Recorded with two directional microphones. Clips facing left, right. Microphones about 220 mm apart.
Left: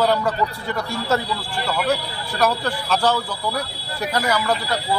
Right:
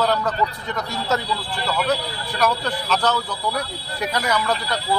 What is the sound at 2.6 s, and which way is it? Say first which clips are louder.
Speech: left 1 dB; 10° left (ahead or behind).